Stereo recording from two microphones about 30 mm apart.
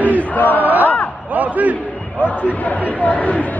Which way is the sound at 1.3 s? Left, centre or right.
Right.